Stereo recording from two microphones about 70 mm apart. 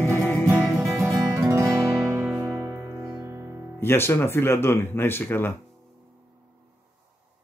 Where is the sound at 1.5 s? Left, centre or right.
Right.